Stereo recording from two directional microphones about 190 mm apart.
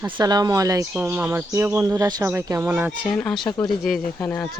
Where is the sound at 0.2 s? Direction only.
20° right (ahead or behind).